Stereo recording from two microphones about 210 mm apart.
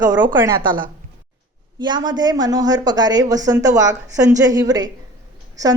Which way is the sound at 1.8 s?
20° right (ahead or behind).